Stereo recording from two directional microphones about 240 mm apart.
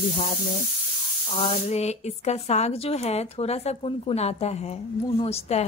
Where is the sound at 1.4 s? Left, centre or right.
Left.